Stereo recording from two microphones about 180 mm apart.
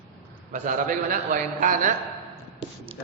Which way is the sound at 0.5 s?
45° right (ahead or behind).